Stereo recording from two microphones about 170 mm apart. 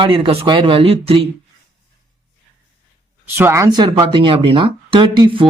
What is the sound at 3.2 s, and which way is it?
Speech, 15° right (ahead or behind).